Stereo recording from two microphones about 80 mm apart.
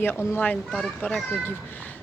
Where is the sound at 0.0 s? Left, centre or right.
Left.